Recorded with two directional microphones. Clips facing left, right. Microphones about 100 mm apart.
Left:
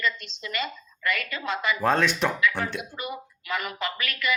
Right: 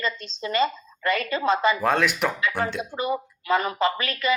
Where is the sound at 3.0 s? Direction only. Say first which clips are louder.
Right 8 dB; 30° right (ahead or behind).